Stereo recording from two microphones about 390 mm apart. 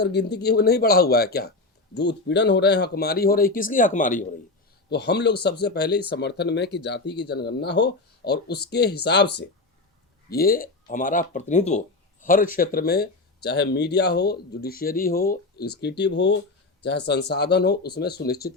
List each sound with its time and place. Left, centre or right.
0.0 s speech: left